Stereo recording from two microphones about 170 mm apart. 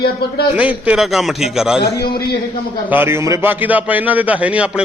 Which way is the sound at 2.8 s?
10° right (ahead or behind).